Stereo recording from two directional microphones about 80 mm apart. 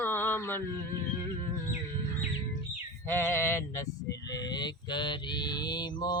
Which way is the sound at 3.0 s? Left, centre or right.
Left.